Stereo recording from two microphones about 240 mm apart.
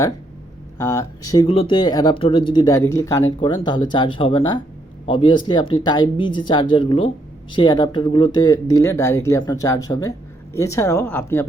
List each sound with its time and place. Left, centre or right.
0.8 s speech: centre